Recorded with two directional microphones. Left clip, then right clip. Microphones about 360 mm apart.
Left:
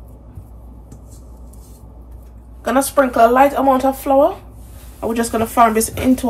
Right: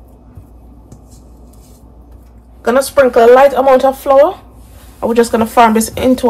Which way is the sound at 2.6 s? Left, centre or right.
Right.